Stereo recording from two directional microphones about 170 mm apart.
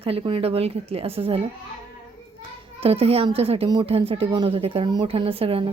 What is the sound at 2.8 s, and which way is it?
A woman's voice, 35° right (ahead or behind).